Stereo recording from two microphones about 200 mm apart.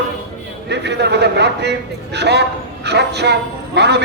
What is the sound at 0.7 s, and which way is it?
A man's voice, 60° right (ahead or behind).